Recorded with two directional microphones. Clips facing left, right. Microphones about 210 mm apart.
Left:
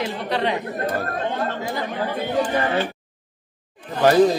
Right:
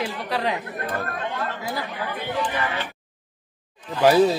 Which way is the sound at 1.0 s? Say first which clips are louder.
Left 4 dB; 30° left (ahead or behind).